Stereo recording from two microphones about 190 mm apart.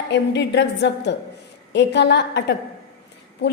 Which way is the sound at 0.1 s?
65° left (ahead or behind).